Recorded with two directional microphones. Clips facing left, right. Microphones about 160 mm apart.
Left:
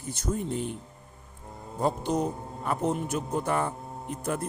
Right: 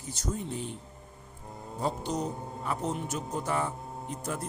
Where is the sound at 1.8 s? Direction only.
50° left (ahead or behind).